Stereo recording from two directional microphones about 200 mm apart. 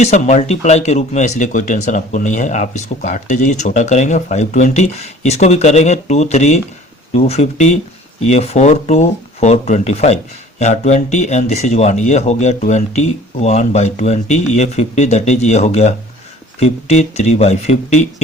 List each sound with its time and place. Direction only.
0.0 s speech: 35° left (ahead or behind)